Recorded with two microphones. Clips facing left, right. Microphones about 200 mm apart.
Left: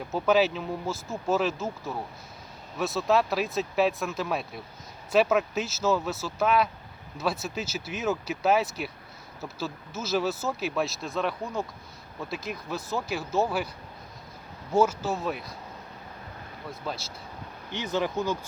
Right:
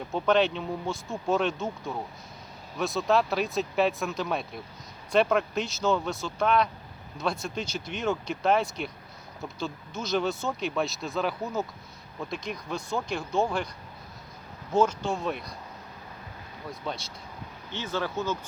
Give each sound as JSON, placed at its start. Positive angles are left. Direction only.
{"t": 0.1, "sound": "speech", "side_deg": 5}
{"t": 14.7, "sound": "speech", "side_deg": 5}
{"t": 16.8, "sound": "speech", "side_deg": 0}
{"t": 17.7, "sound": "speech", "side_deg": 15}